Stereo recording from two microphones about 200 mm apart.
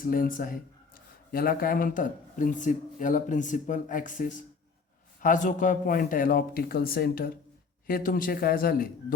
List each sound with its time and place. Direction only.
0.0 s speech: 45° left (ahead or behind)